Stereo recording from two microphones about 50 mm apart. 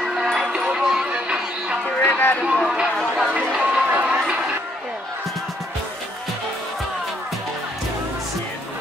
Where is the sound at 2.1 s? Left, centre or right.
Left.